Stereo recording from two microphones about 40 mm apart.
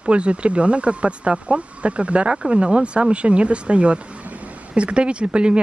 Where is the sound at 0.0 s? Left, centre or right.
Right.